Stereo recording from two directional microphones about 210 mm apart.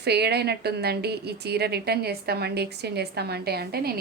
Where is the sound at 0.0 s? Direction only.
50° right (ahead or behind).